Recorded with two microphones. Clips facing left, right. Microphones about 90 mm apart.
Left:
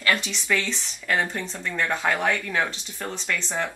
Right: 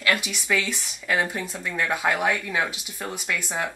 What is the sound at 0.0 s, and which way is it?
Speech, 5° right (ahead or behind).